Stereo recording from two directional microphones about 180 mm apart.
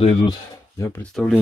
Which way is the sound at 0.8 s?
10° left (ahead or behind).